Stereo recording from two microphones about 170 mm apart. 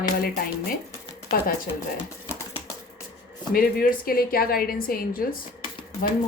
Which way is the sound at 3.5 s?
60° left (ahead or behind).